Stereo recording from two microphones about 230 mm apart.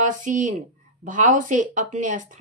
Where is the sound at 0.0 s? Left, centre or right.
Right.